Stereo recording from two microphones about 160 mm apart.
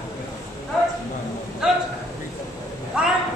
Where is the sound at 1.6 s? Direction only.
5° right (ahead or behind).